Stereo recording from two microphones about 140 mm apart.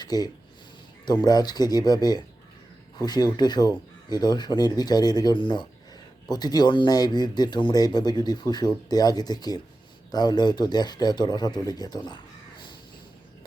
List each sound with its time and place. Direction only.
0.0 s speech: 30° left (ahead or behind)